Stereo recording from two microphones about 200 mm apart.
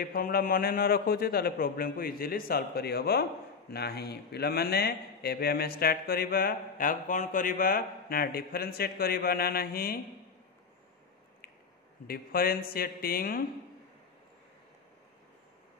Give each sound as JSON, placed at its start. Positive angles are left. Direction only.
{"t": 0.0, "sound": "speech", "side_deg": 45}
{"t": 12.1, "sound": "speech", "side_deg": 45}